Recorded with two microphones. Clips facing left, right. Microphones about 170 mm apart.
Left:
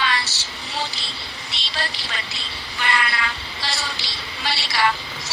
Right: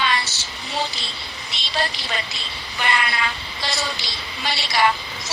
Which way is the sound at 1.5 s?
20° right (ahead or behind).